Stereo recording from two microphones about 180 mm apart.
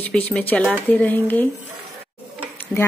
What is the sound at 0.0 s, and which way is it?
Speech, 5° left (ahead or behind).